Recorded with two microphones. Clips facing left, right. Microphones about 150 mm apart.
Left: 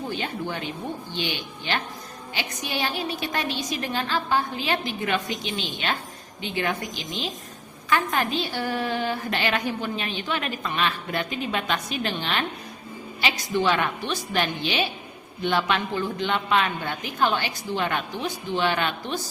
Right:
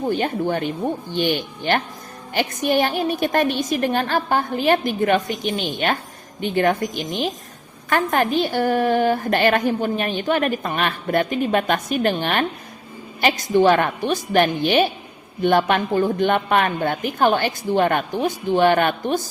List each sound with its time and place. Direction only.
0.1 s a woman's voice: 50° right (ahead or behind)